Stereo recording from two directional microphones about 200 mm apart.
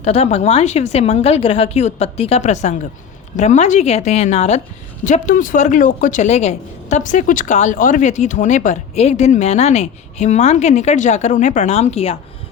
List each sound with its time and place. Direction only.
0.0 s speech: 30° left (ahead or behind)